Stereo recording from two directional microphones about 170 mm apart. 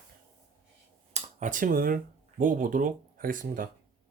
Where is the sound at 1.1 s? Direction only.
45° right (ahead or behind).